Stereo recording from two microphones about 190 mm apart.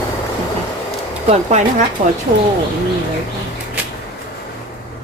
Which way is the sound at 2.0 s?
40° right (ahead or behind).